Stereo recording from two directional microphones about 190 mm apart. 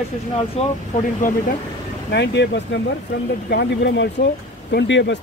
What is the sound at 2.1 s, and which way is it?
Speech, 65° left (ahead or behind).